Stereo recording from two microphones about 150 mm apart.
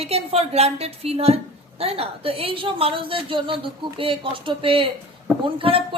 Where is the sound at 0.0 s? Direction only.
40° right (ahead or behind).